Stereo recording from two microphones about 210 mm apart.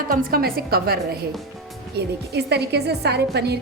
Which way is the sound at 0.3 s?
45° right (ahead or behind).